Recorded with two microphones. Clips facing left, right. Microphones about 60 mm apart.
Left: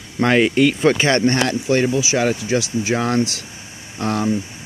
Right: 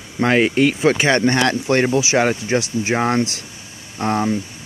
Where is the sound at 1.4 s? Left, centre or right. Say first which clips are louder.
Right 1 dB; right.